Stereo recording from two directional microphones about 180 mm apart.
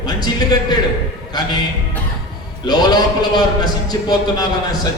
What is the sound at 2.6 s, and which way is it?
A man's voice, 20° left (ahead or behind).